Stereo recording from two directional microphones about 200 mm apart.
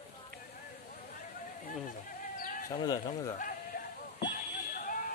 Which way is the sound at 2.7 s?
20° left (ahead or behind).